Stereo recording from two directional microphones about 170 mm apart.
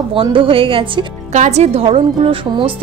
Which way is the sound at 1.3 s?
40° right (ahead or behind).